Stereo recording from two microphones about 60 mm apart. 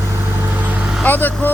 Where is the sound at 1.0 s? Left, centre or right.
Left.